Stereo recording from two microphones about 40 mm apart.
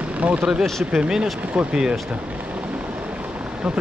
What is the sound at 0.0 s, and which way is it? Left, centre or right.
Vehicle, right.